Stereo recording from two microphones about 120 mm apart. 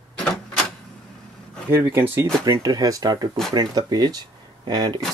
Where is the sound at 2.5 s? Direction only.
30° right (ahead or behind).